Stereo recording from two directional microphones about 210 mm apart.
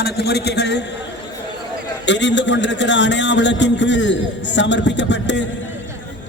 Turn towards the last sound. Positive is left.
turn(degrees=60)  # may be behind; listen again after turning